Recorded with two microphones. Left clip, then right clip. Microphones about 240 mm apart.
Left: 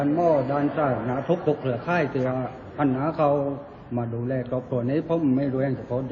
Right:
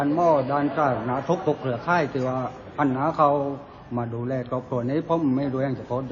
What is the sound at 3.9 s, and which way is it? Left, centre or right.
Speech, right.